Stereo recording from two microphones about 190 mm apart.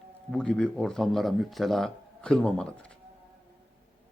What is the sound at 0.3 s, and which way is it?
Speech, 5° left (ahead or behind).